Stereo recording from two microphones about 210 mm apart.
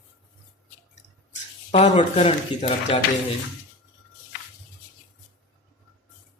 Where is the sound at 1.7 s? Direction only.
30° left (ahead or behind).